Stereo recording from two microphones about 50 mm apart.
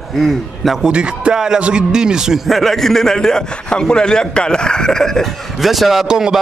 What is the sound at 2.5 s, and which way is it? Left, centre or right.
A man's voice, centre.